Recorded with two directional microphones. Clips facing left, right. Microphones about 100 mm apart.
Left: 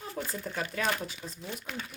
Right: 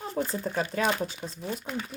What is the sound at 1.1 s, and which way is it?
Speech, 30° right (ahead or behind).